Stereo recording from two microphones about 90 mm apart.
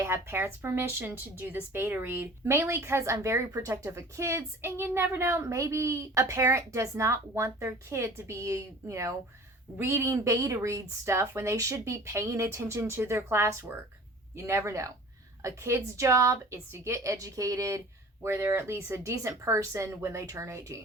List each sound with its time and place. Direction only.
0.0 s a woman's voice: 30° right (ahead or behind)